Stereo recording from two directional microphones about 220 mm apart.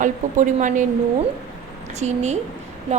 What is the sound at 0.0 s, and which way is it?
Speech, 35° right (ahead or behind).